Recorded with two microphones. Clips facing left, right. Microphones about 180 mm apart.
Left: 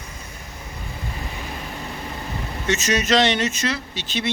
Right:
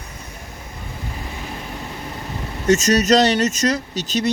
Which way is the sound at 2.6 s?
40° right (ahead or behind).